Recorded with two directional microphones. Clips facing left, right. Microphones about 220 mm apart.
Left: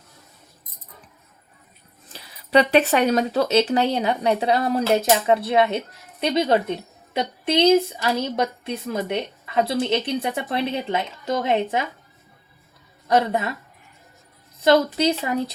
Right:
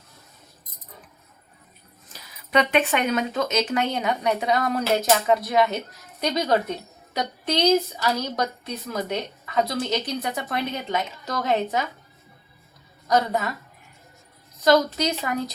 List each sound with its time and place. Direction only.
2.1 s speech: 35° left (ahead or behind)
13.1 s speech: 30° left (ahead or behind)
14.9 s speech: 30° left (ahead or behind)